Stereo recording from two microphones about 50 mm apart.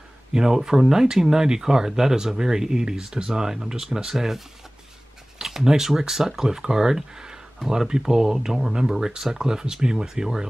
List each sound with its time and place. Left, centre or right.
0.3 s speech: centre
5.4 s speech: centre